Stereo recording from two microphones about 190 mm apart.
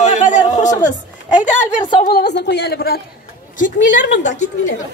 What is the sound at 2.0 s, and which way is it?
A woman's voice, 55° left (ahead or behind).